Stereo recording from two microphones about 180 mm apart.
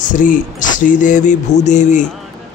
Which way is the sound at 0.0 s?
45° left (ahead or behind).